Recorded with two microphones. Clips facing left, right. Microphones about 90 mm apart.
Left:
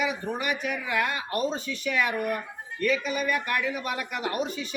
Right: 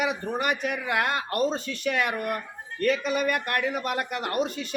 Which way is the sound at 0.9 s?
55° right (ahead or behind).